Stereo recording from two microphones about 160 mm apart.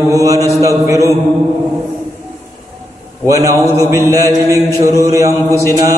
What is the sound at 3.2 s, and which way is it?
Mantra, 20° right (ahead or behind).